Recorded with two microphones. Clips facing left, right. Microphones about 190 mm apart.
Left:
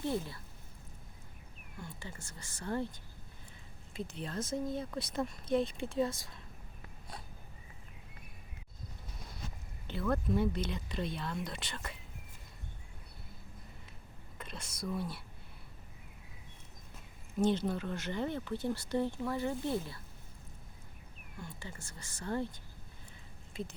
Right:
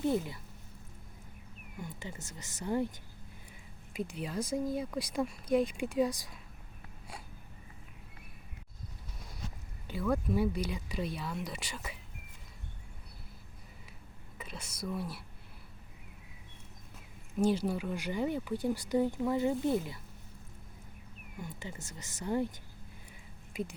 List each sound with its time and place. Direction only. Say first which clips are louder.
0.0 s speech: right 4 dB; 15° right (ahead or behind)
1.8 s speech: right 4 dB; 20° right (ahead or behind)
3.9 s speech: right 3 dB; 10° right (ahead or behind)
9.8 s speech: right 2 dB; 10° right (ahead or behind)
14.3 s speech: right 1 dB; 5° right (ahead or behind)
17.4 s speech: right 1 dB; 10° right (ahead or behind)
21.3 s speech: right 3 dB; 20° right (ahead or behind)